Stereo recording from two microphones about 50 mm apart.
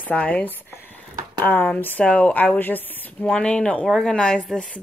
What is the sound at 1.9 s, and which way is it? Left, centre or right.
Speech, left.